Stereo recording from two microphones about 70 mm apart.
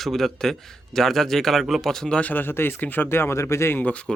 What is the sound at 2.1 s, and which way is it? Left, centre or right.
Speech, left.